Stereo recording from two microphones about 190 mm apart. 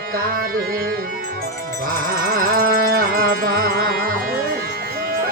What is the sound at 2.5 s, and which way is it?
Music, 50° right (ahead or behind).